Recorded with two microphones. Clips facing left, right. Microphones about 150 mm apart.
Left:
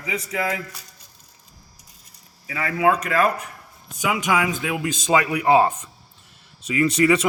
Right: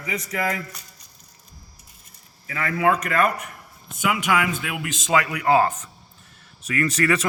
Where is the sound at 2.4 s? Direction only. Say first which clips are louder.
Left 1 dB; 10° left (ahead or behind).